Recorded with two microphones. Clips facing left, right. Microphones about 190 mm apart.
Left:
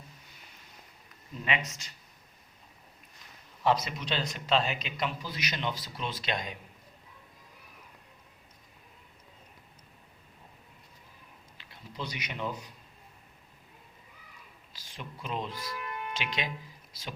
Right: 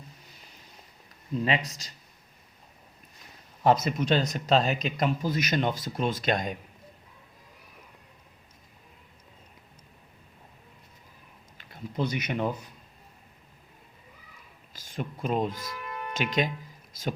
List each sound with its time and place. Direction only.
1.5 s speech: 35° right (ahead or behind)
3.6 s speech: 45° right (ahead or behind)
11.5 s a man's voice: 50° right (ahead or behind)
14.7 s speech: 45° right (ahead or behind)